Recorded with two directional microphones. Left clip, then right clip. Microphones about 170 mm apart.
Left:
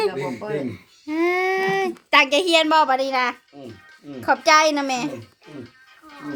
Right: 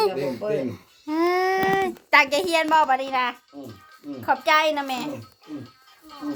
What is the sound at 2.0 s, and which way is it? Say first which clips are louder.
A woman's voice: left 2 dB; 35° left (ahead or behind).